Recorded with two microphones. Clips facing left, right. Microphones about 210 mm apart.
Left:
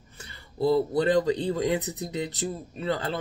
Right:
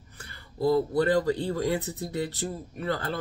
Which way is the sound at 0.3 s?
25° left (ahead or behind).